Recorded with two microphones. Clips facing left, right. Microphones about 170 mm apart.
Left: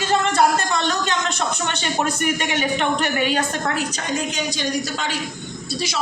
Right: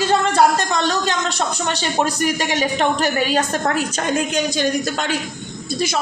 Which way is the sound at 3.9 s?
55° right (ahead or behind).